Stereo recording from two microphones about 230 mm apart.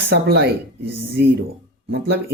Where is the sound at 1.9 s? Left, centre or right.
Right.